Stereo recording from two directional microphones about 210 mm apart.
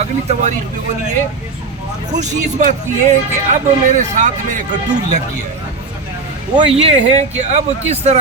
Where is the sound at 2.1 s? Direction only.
35° right (ahead or behind).